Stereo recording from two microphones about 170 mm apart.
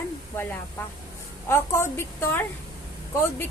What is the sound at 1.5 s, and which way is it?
Speech, 15° left (ahead or behind).